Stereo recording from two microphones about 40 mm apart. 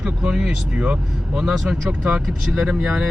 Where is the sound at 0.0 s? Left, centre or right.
Centre.